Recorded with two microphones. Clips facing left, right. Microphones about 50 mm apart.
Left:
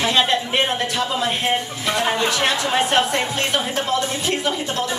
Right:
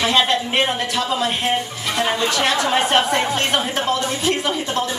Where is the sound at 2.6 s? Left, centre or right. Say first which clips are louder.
Right 2 dB; right.